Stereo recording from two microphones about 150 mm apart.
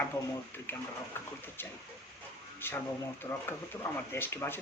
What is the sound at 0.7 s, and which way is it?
Speech, 15° left (ahead or behind).